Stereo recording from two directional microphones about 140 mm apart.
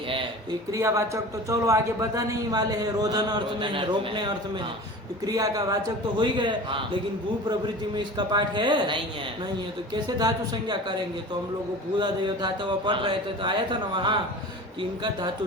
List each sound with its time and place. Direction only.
0.7 s a man's voice: 20° right (ahead or behind)
7.9 s speech: 30° right (ahead or behind)